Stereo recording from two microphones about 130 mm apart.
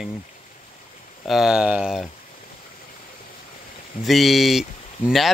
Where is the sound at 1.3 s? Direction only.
5° right (ahead or behind).